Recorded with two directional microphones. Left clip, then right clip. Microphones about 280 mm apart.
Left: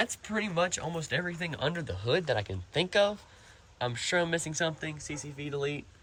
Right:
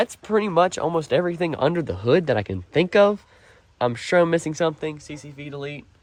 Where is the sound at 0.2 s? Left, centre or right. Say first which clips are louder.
Right 11 dB; centre.